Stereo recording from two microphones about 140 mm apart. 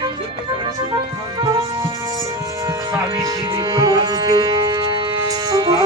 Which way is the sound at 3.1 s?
30° right (ahead or behind).